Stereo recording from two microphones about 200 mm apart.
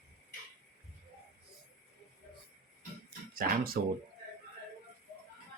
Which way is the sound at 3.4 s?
45° right (ahead or behind).